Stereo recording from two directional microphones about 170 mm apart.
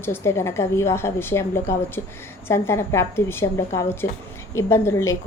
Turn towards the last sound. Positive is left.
turn(degrees=15)  # may be behind; listen again after turning